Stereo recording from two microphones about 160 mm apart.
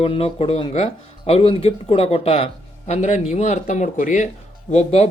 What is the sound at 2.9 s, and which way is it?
Speech, 45° left (ahead or behind).